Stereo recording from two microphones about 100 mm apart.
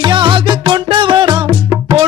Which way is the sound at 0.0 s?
55° right (ahead or behind).